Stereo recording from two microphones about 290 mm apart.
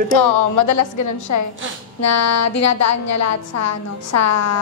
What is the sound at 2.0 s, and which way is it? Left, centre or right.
A woman's voice, left.